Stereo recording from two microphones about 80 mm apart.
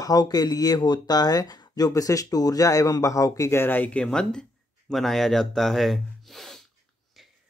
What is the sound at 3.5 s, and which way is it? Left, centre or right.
Speech, left.